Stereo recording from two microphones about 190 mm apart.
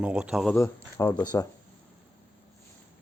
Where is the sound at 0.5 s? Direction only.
15° left (ahead or behind).